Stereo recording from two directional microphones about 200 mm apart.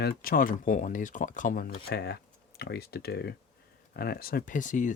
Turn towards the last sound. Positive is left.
turn(degrees=40)  # may be behind; listen again after turning